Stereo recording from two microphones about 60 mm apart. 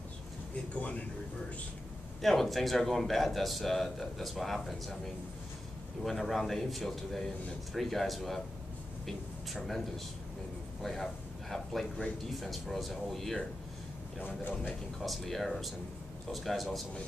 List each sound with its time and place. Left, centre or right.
0.7 s a man's voice: left
2.2 s speech: centre
6.0 s a man's voice: centre
12.4 s speech: centre
15.0 s speech: centre